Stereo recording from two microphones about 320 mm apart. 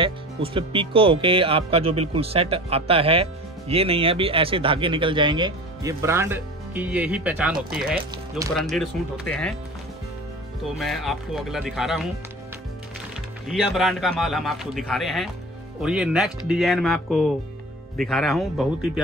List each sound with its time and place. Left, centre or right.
0.0 s speech: centre
8.5 s a man's voice: centre
10.6 s a man's voice: centre
13.5 s a man's voice: centre